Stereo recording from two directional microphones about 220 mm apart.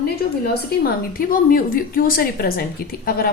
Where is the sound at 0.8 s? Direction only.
40° left (ahead or behind).